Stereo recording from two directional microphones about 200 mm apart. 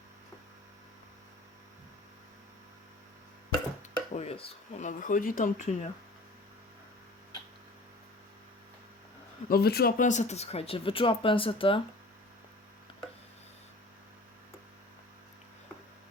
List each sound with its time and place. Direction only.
4.1 s speech: 30° left (ahead or behind)
9.5 s speech: 50° left (ahead or behind); by 11.8 s 25° left (ahead or behind)